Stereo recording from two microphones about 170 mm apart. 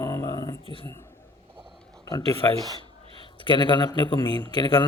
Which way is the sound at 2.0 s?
25° left (ahead or behind).